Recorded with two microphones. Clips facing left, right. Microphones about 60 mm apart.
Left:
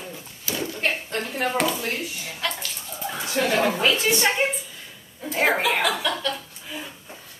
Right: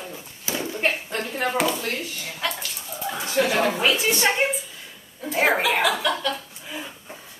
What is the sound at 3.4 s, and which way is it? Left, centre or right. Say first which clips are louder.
A woman's voice: even; centre.